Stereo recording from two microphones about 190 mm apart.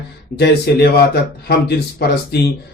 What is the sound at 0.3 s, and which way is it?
Speech, 60° left (ahead or behind).